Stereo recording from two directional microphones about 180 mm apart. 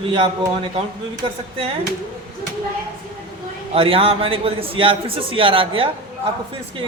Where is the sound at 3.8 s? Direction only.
30° right (ahead or behind).